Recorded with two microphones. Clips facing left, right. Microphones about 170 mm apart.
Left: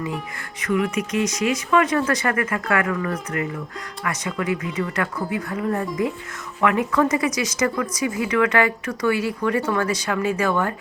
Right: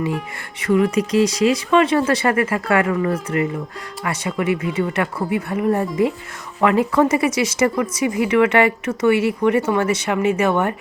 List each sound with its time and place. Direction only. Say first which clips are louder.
0.6 s speech: right 5 dB; 30° right (ahead or behind)